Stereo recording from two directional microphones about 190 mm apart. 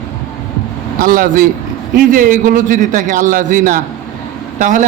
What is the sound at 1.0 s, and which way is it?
A man's voice, 50° right (ahead or behind).